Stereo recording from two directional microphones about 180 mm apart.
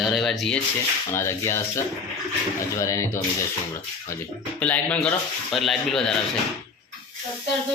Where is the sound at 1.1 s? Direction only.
15° left (ahead or behind).